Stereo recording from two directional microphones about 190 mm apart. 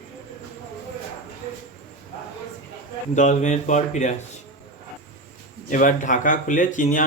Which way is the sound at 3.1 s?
40° left (ahead or behind).